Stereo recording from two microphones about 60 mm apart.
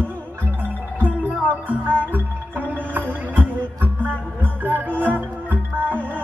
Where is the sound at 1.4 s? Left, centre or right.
Right.